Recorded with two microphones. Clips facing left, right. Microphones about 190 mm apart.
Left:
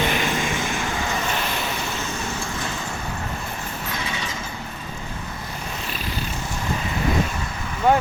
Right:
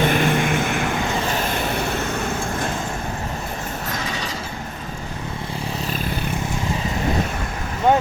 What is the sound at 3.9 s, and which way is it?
Vehicle, 40° right (ahead or behind).